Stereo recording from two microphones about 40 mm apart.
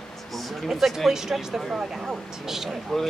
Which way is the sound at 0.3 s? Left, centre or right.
Centre.